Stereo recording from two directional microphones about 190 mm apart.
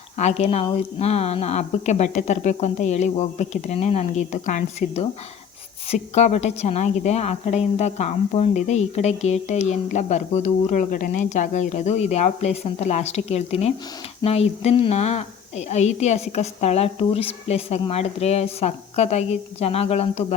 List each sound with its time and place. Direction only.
0.2 s a woman's voice: 35° left (ahead or behind)